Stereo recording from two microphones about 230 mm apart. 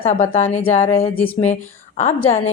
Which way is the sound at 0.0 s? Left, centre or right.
Left.